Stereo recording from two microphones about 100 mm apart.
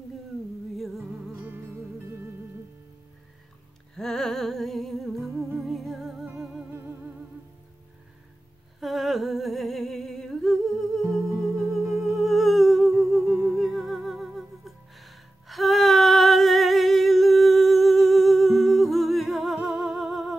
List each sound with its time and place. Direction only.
0.7 s music: centre (ahead or behind)
3.9 s music: 5° left (ahead or behind)
5.3 s humming: 25° right (ahead or behind)
5.6 s music: centre (ahead or behind)
6.7 s music: 20° right (ahead or behind)
8.7 s humming: centre (ahead or behind)